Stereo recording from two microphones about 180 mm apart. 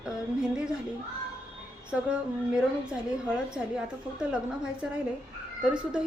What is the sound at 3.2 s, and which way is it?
A woman's voice, 5° right (ahead or behind).